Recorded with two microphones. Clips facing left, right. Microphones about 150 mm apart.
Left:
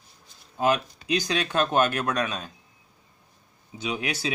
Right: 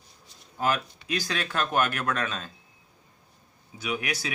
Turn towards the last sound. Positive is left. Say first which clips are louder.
# left 2 dB
turn(degrees=25)  # may be behind; listen again after turning